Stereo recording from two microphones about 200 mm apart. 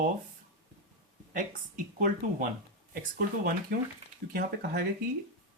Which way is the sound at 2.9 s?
45° right (ahead or behind).